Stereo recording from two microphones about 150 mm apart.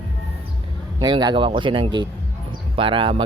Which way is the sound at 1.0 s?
30° right (ahead or behind).